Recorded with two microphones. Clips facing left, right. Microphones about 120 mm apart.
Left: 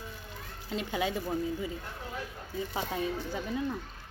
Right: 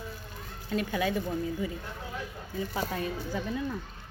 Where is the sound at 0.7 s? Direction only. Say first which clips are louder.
Right 3 dB; 25° left (ahead or behind).